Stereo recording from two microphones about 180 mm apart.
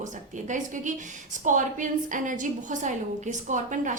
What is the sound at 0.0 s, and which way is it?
A woman's voice, 45° right (ahead or behind).